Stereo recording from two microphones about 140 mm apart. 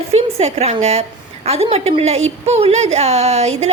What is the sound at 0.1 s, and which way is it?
A woman's voice, 50° right (ahead or behind).